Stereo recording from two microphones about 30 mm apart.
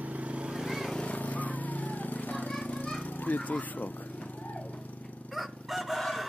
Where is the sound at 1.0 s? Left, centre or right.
Left.